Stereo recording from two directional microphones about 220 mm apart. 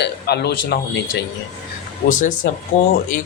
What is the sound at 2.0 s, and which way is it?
Speech, 35° left (ahead or behind).